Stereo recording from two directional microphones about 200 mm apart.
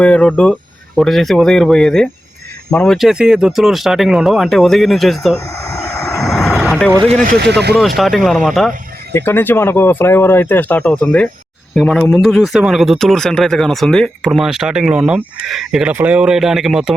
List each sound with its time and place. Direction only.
0.0 s speech: 5° left (ahead or behind)
5.7 s vehicle: 15° left (ahead or behind)
6.2 s vehicle: centre (ahead or behind)
7.4 s speech: 55° right (ahead or behind)
7.8 s speech: centre (ahead or behind)